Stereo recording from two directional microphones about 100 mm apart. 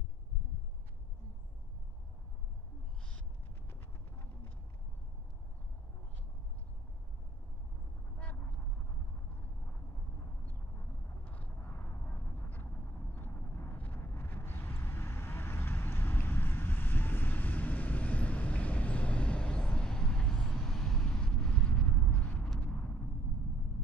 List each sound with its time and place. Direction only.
8.2 s vehicle: 15° left (ahead or behind)
11.2 s vehicle: 15° left (ahead or behind)